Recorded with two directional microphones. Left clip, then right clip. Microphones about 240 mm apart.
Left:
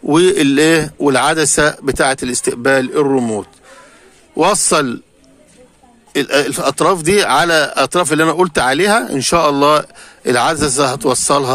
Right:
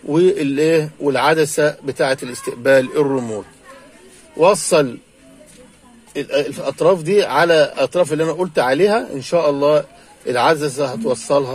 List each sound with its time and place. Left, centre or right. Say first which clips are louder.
0.1 s a man's voice: left 4 dB; left
6.1 s a man's voice: left 5 dB; left